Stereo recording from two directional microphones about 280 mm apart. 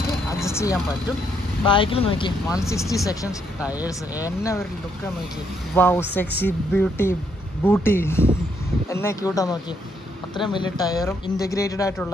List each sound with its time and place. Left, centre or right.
0.4 s vehicle: centre
1.7 s speech: centre
3.6 s speech: centre
4.2 s speech: centre
5.8 s speech: centre